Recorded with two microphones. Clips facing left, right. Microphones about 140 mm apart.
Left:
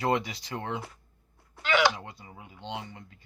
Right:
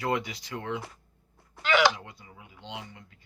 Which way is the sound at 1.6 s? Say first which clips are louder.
Right 1 dB; 90° right.